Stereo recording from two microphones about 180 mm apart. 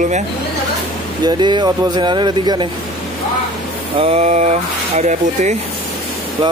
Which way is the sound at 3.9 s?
35° right (ahead or behind).